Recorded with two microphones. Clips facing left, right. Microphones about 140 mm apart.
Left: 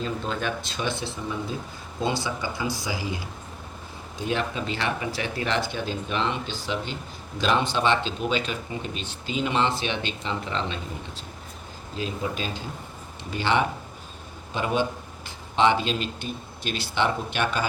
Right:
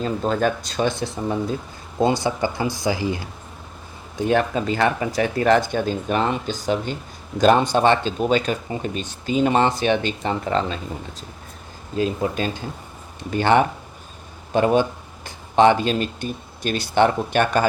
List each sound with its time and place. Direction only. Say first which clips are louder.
0.0 s speech: right 8 dB; 40° right (ahead or behind)
4.3 s speech: right 8 dB; 50° right (ahead or behind)
11.9 s speech: right 8 dB; 50° right (ahead or behind)